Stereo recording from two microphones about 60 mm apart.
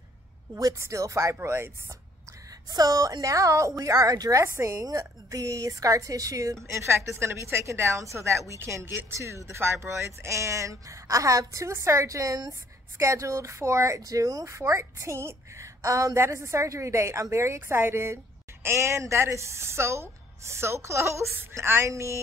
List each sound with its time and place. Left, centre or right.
0.7 s a woman's voice: right
1.4 s a woman's voice: right
2.7 s a woman's voice: right
12.9 s a woman's voice: right
17.6 s a woman's voice: right
21.8 s a woman's voice: right